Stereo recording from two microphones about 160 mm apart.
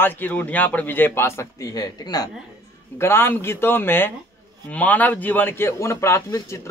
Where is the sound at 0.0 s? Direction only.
10° left (ahead or behind).